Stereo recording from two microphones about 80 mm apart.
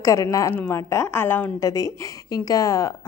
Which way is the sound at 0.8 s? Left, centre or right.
Left.